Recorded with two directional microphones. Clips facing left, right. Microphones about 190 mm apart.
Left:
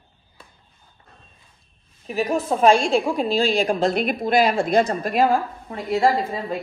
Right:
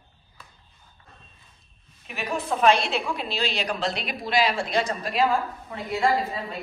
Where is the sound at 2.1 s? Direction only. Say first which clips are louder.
Left 7 dB; 35° left (ahead or behind); by 5.2 s 50° left (ahead or behind).